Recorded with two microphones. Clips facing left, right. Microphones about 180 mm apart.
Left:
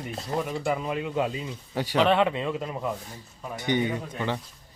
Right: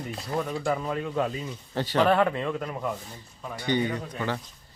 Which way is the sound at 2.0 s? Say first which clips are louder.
Even; centre (ahead or behind).